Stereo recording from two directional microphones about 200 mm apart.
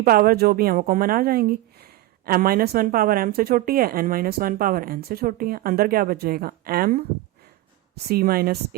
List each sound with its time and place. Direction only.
0.0 s speech: 50° right (ahead or behind)